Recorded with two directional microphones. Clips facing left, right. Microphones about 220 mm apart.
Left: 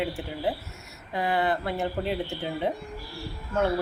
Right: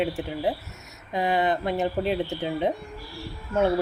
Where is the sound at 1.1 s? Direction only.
20° right (ahead or behind).